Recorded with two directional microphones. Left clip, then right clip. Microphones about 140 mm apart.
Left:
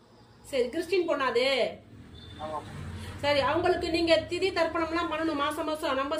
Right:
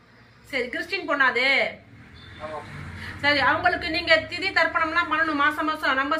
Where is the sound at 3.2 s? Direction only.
40° left (ahead or behind).